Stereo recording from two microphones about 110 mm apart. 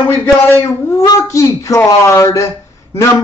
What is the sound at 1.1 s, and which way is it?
Speech, 30° left (ahead or behind).